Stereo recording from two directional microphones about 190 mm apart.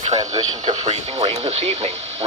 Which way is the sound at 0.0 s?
25° right (ahead or behind).